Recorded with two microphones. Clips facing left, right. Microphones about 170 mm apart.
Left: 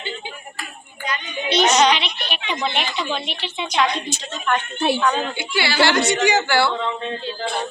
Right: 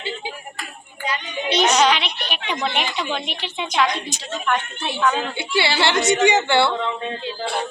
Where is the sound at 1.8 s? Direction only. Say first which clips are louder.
Left 1 dB; 5° right (ahead or behind).